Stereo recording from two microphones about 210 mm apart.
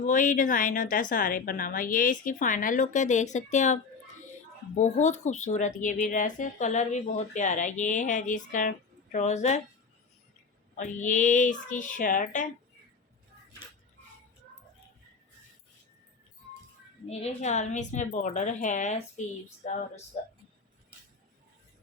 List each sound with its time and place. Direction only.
0.0 s speech: 40° left (ahead or behind)
10.8 s speech: 35° left (ahead or behind)
17.1 s speech: 30° left (ahead or behind)